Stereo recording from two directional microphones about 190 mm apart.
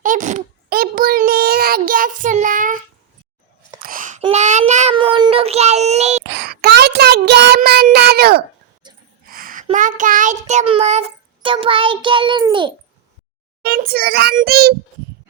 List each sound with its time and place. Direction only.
0.0 s a sound: 40° right (ahead or behind)
3.8 s a sound: 45° right (ahead or behind)
4.2 s child singing: 35° right (ahead or behind)
4.9 s child singing: 25° right (ahead or behind)
6.2 s child singing: 65° right (ahead or behind)
7.9 s a sound: 55° right (ahead or behind)
9.6 s child singing: 40° right (ahead or behind)
11.4 s a child's voice: 25° right (ahead or behind)
13.6 s a child's voice: 50° right (ahead or behind)